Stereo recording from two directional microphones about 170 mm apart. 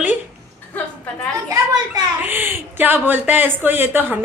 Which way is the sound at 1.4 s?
20° right (ahead or behind).